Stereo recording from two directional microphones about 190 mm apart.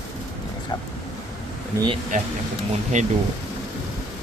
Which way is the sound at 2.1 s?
45° right (ahead or behind).